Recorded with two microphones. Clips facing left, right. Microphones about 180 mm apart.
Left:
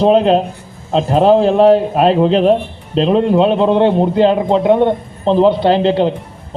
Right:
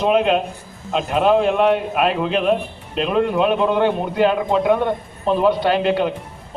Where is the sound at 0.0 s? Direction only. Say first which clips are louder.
Left 6 dB; 35° left (ahead or behind).